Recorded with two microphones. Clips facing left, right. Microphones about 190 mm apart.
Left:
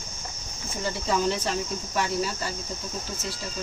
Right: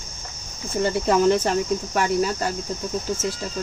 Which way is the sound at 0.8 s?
60° right (ahead or behind).